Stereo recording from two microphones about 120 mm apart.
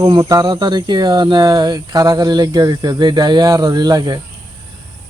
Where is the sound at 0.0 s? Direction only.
30° right (ahead or behind).